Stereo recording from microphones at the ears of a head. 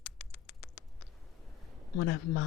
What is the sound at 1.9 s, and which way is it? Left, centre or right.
Speech, left.